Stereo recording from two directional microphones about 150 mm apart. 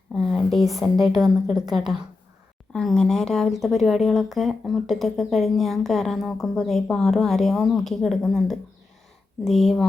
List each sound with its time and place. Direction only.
0.1 s speech: 5° left (ahead or behind)
1.1 s a woman's voice: 25° right (ahead or behind)
2.7 s speech: 5° left (ahead or behind)